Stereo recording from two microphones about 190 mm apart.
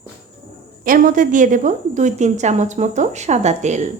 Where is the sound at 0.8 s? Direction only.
45° right (ahead or behind).